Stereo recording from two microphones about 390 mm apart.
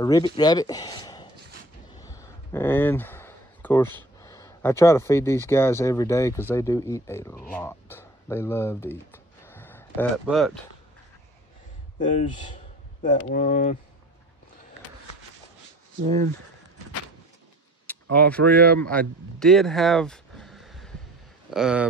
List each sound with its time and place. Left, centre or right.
0.0 s speech: centre
2.0 s a sound: centre
4.2 s speech: centre
7.5 s a sound: centre
12.0 s speech: centre
18.1 s speech: centre